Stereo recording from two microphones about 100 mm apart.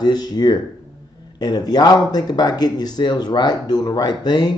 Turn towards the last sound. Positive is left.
turn(degrees=45)  # may be behind; listen again after turning